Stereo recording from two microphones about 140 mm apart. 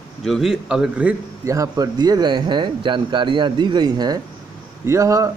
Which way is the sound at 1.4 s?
25° right (ahead or behind).